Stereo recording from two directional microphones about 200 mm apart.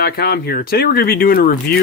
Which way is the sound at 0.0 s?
50° left (ahead or behind).